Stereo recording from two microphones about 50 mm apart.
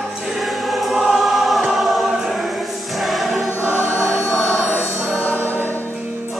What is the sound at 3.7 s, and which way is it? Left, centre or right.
Choir, left.